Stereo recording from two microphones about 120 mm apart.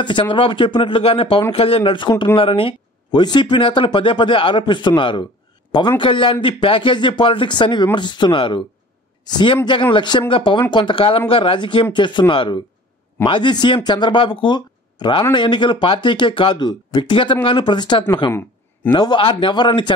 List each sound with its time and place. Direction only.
0.0 s a man's voice: 45° left (ahead or behind)